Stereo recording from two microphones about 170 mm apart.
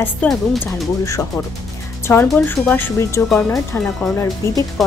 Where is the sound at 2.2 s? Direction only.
10° left (ahead or behind).